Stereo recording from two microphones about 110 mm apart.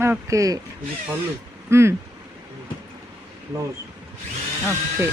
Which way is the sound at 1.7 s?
25° right (ahead or behind).